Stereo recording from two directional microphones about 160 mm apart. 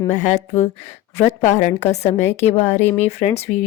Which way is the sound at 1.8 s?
45° left (ahead or behind).